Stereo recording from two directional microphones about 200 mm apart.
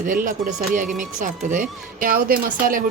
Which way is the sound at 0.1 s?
45° right (ahead or behind).